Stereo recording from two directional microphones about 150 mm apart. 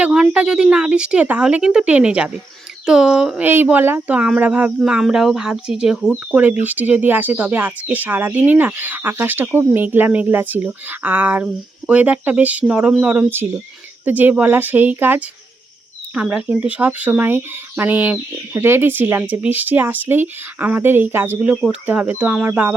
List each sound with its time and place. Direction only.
0.0 s speech: 5° right (ahead or behind)